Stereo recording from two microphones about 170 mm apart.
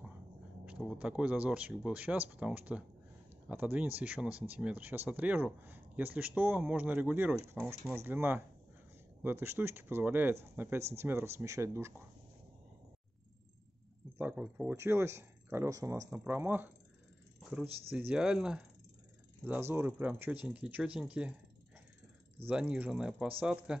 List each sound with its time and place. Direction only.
0.7 s speech: 5° right (ahead or behind)
14.1 s speech: 10° right (ahead or behind)
17.4 s a sound: centre (ahead or behind)
17.9 s speech: 5° right (ahead or behind)
22.5 s speech: 5° right (ahead or behind)